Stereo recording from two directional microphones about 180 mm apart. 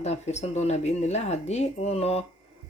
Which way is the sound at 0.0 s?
40° left (ahead or behind).